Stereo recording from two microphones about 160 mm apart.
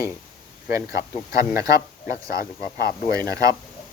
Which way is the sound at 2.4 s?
75° left (ahead or behind).